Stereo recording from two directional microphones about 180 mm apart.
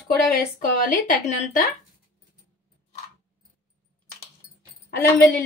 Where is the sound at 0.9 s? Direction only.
45° left (ahead or behind).